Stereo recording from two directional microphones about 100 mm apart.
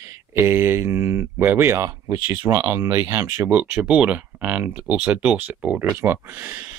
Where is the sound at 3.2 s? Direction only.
15° right (ahead or behind).